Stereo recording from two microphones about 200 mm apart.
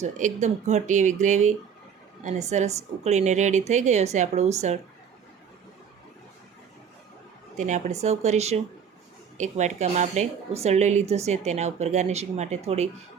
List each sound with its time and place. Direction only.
0.0 s speech: 35° right (ahead or behind)
7.5 s speech: 35° right (ahead or behind)